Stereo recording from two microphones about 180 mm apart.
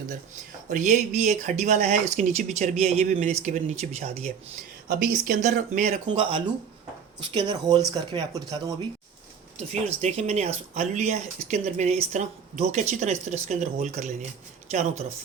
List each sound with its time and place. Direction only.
0.7 s speech: 40° right (ahead or behind)
4.9 s speech: 50° right (ahead or behind)
6.1 s speech: 30° right (ahead or behind)
9.7 s speech: 40° right (ahead or behind)